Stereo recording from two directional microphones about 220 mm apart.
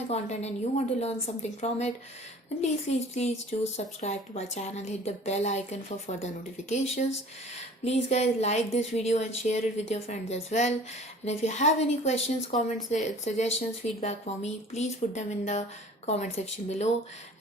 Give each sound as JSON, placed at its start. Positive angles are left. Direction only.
{"t": 0.1, "sound": "speech", "side_deg": 30}